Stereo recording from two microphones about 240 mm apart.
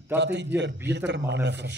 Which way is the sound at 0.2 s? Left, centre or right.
Right.